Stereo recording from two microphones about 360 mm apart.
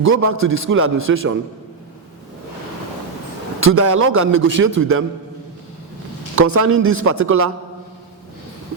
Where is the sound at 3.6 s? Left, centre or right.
Right.